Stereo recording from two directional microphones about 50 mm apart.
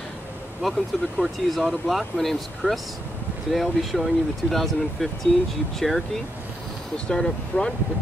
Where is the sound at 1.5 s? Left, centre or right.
Centre.